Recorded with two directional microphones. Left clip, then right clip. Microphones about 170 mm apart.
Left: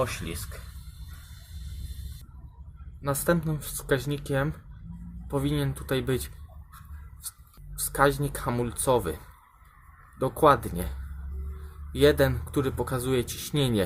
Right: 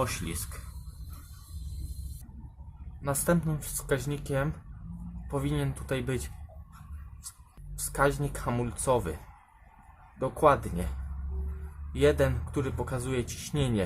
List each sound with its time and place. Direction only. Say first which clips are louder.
0.0 s speech: left 2 dB; 10° left (ahead or behind)
3.1 s speech: left 2 dB; 10° left (ahead or behind)
5.5 s speech: left 4 dB; 10° left (ahead or behind)
7.9 s speech: left 4 dB; 10° left (ahead or behind)